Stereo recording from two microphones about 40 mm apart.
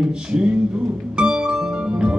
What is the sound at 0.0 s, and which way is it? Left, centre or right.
Music, centre.